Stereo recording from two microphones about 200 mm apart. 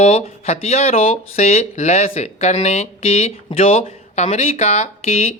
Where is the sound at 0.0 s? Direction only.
30° left (ahead or behind).